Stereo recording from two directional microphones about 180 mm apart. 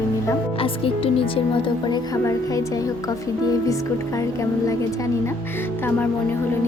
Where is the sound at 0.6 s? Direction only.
30° left (ahead or behind).